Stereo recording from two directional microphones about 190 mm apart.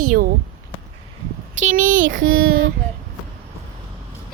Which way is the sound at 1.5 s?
40° right (ahead or behind).